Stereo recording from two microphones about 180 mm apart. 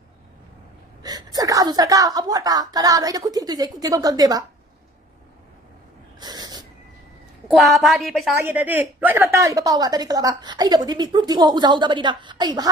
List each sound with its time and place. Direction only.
1.0 s a woman's voice: 20° right (ahead or behind)
6.1 s a sound: 20° right (ahead or behind)
7.5 s a woman's voice: centre (ahead or behind)
8.4 s a woman's voice: 10° right (ahead or behind)